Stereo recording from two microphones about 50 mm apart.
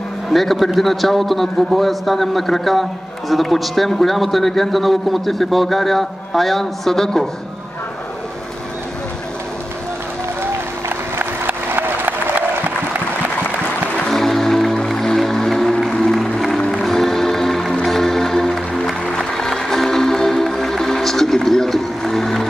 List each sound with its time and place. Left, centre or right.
0.3 s a man's voice: centre
10.4 s applause: right
14.0 s music: centre